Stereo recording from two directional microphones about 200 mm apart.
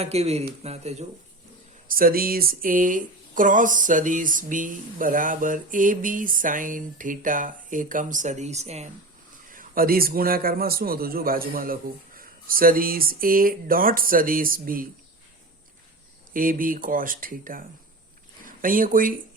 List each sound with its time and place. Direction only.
0.0 s speech: 30° right (ahead or behind)
1.9 s speech: 45° right (ahead or behind)
9.5 s a man's voice: 45° right (ahead or behind)
16.3 s a man's voice: 45° right (ahead or behind)